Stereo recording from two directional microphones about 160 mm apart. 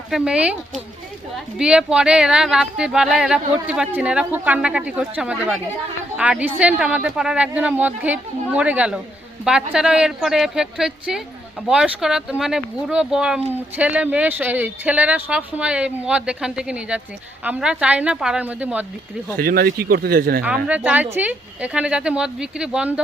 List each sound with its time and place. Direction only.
0.1 s speech: 5° right (ahead or behind)
1.5 s speech: 5° right (ahead or behind)
19.4 s a man's voice: 70° right (ahead or behind)
20.7 s speech: 10° right (ahead or behind)